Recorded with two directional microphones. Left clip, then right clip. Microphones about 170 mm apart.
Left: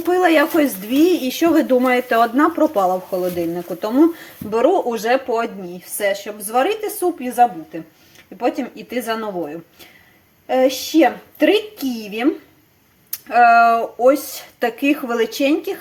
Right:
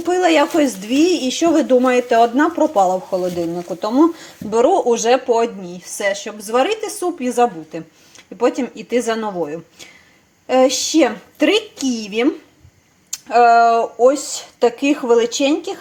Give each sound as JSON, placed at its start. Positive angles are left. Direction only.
{"t": 0.1, "sound": "a woman's voice", "side_deg": 0}